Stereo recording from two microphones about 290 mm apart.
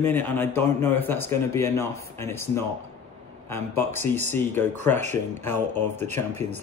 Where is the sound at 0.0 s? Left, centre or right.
Centre.